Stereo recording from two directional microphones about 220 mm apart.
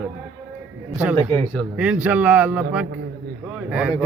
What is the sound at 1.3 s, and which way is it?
Speech, 10° left (ahead or behind).